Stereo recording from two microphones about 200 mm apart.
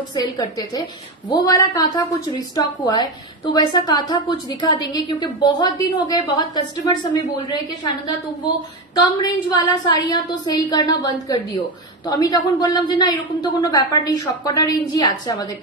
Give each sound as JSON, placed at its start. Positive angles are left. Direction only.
{"t": 0.1, "sound": "a woman's voice", "side_deg": 20}
{"t": 8.9, "sound": "a woman's voice", "side_deg": 20}